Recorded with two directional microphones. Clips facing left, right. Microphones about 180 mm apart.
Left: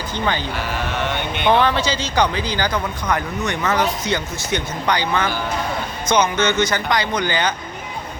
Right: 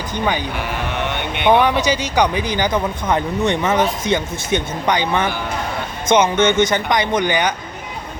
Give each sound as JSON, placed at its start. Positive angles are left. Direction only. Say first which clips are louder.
{"t": 0.1, "sound": "speech", "louder": "right 2 dB", "side_deg": -15}
{"t": 1.5, "sound": "speech", "louder": "right 3 dB", "side_deg": -15}